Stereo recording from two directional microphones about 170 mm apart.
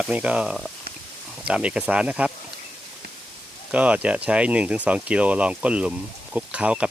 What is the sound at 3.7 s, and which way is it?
Speech, 5° right (ahead or behind).